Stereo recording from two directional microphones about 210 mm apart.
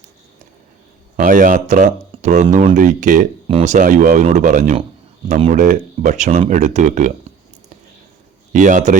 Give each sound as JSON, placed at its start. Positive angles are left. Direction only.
{"t": 1.1, "sound": "speech", "side_deg": -40}
{"t": 8.5, "sound": "speech", "side_deg": -35}